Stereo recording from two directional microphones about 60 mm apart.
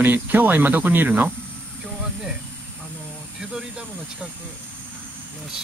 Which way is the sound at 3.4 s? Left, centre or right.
Centre.